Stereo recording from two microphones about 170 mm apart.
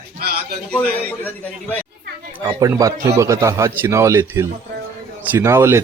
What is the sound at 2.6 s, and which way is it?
Speech, 20° right (ahead or behind).